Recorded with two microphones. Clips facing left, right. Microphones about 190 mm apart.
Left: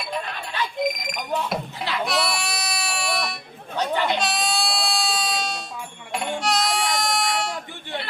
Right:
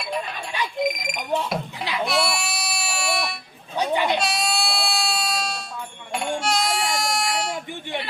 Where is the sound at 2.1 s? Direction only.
Centre (ahead or behind).